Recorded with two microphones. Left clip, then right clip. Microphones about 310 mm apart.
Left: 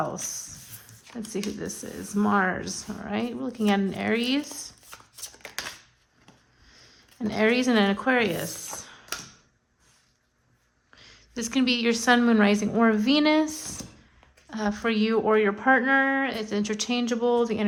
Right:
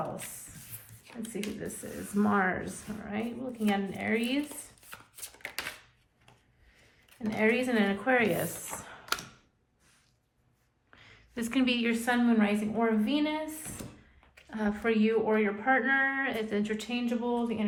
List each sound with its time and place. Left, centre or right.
1.0 s speech: centre
4.9 s a sound: centre
7.3 s speech: centre
10.9 s a woman's voice: centre; by 13.5 s left
14.5 s speech: centre